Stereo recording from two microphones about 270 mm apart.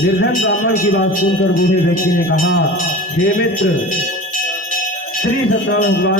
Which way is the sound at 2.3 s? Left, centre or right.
Left.